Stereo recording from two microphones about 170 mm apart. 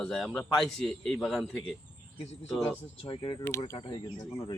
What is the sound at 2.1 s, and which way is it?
Speech, 40° left (ahead or behind).